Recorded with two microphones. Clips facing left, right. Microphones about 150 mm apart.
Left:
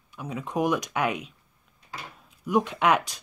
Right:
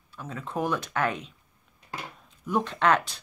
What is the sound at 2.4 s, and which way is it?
Speech, 10° left (ahead or behind).